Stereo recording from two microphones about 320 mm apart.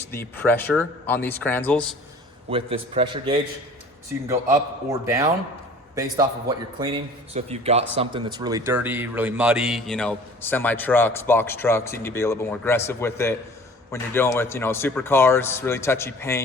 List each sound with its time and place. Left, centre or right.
0.1 s a man's voice: centre
2.5 s a man's voice: centre